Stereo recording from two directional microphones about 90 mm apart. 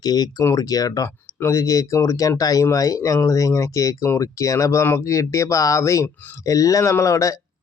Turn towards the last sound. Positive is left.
turn(degrees=35)  # may be behind; listen again after turning